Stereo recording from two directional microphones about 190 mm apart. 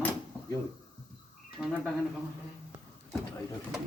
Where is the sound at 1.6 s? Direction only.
5° left (ahead or behind).